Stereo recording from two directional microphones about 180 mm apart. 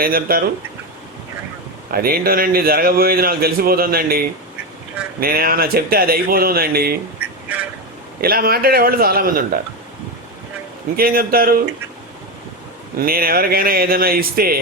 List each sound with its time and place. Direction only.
0.0 s a man's voice: 55° right (ahead or behind)
1.9 s a man's voice: 55° right (ahead or behind)
5.2 s a man's voice: 55° right (ahead or behind)
7.2 s a sound: 10° right (ahead or behind)
8.2 s a man's voice: 55° right (ahead or behind)
10.9 s a man's voice: 55° right (ahead or behind)
13.0 s a man's voice: 55° right (ahead or behind)